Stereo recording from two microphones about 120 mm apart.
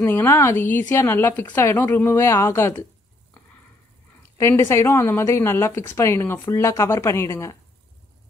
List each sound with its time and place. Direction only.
0.0 s a woman's voice: 20° left (ahead or behind)
4.4 s a woman's voice: 20° left (ahead or behind)